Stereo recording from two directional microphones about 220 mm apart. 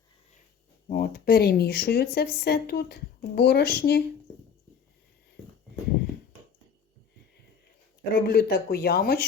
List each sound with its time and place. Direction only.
0.9 s speech: 40° left (ahead or behind)
8.1 s speech: 45° left (ahead or behind)